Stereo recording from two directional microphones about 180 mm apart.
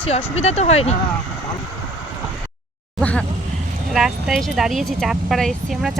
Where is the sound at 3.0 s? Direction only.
5° left (ahead or behind).